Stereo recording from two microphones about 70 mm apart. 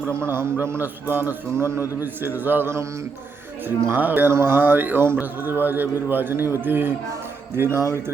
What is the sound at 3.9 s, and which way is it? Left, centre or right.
Speech, right.